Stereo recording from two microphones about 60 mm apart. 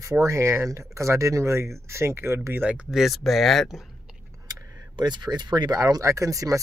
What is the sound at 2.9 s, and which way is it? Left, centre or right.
Speech, centre.